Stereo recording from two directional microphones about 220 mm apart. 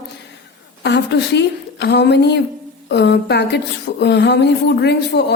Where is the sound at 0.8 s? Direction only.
50° left (ahead or behind).